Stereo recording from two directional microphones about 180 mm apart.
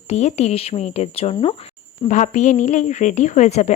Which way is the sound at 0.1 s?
35° left (ahead or behind).